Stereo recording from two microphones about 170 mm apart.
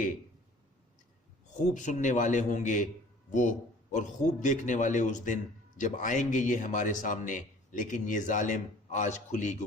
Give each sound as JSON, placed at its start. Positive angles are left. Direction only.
{"t": 1.5, "sound": "a man's voice", "side_deg": 45}